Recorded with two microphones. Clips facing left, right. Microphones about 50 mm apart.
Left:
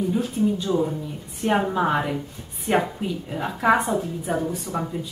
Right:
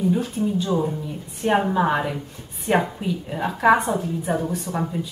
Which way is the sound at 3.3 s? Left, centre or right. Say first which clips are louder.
Right 3 dB; centre.